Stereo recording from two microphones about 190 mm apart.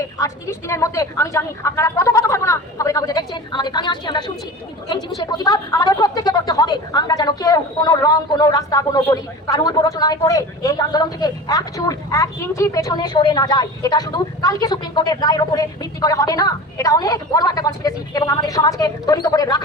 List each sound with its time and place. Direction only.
0.2 s a woman's voice: 15° left (ahead or behind)